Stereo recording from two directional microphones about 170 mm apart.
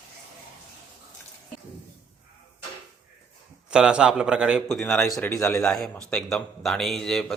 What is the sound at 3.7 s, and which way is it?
Speech, 5° right (ahead or behind).